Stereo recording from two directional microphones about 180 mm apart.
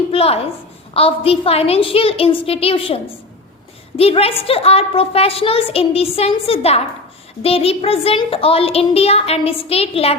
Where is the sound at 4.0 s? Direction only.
35° left (ahead or behind).